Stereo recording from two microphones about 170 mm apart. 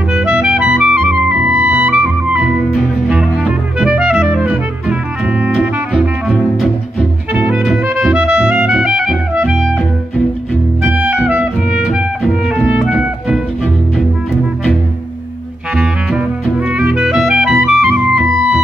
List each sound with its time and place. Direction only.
0.2 s clarinet: 5° right (ahead or behind)
7.3 s music: 5° right (ahead or behind)
15.7 s clarinet: 5° right (ahead or behind)